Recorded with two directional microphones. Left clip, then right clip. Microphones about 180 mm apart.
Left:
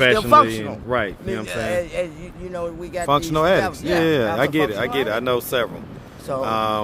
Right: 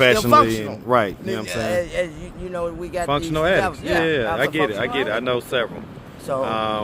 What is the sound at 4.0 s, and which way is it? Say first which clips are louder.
Speech: left 2 dB; 30° left (ahead or behind).